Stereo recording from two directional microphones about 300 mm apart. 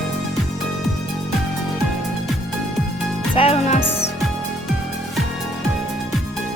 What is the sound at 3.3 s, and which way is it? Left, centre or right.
Music, centre.